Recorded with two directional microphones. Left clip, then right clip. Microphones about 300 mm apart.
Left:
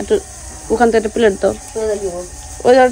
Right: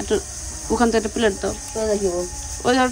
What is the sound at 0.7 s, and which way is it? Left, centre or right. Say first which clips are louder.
Cricket: left 7 dB; centre.